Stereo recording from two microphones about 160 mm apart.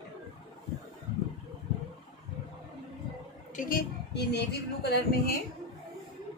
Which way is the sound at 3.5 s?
65° left (ahead or behind).